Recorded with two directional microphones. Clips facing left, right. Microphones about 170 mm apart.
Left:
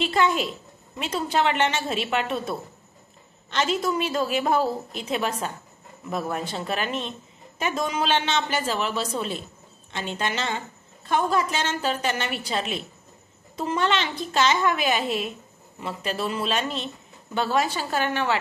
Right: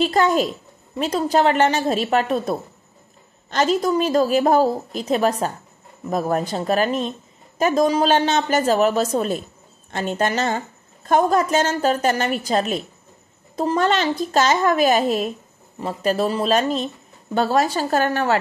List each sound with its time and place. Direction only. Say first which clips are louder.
0.0 s a woman's voice: right 5 dB; 40° right (ahead or behind)